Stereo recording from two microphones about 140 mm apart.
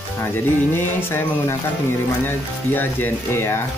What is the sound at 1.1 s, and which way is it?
Speech, 15° left (ahead or behind).